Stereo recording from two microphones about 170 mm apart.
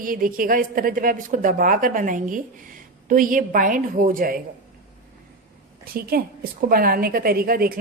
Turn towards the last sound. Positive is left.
turn(degrees=-60)  # may be behind; listen again after turning